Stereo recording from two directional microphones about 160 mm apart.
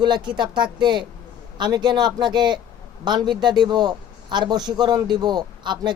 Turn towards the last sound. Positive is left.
turn(degrees=-30)  # may be behind; listen again after turning